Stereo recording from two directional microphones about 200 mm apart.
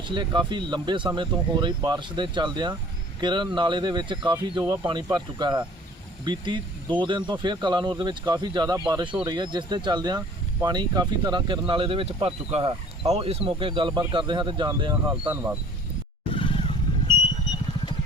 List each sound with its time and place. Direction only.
0.1 s speech: 25° right (ahead or behind)
16.3 s roaring cats: 25° left (ahead or behind)